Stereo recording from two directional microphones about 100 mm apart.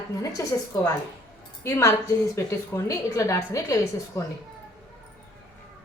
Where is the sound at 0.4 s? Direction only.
35° left (ahead or behind).